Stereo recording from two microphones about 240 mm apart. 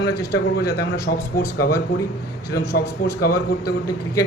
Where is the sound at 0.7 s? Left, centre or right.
Centre.